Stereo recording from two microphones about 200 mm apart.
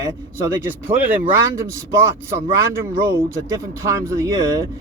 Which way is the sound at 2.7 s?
15° right (ahead or behind).